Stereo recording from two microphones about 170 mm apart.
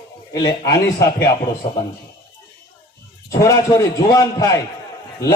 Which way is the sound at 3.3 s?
20° left (ahead or behind).